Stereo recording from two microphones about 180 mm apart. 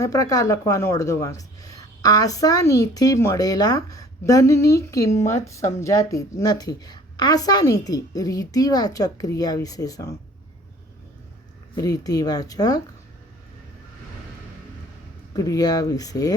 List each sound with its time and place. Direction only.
0.0 s a woman's voice: 20° left (ahead or behind)
11.8 s a woman's voice: 20° left (ahead or behind)
15.3 s a woman's voice: 20° left (ahead or behind)